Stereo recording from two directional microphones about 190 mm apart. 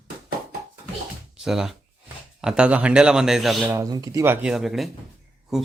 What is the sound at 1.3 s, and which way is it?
A man's voice, 5° right (ahead or behind).